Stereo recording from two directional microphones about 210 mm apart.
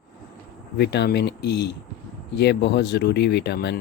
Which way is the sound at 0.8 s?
55° left (ahead or behind).